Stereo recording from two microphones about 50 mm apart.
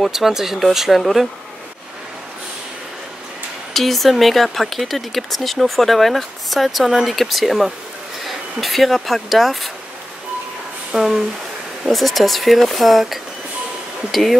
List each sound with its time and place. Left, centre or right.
0.0 s speech: centre
3.7 s speech: centre
10.9 s a sound: centre
11.8 s speech: centre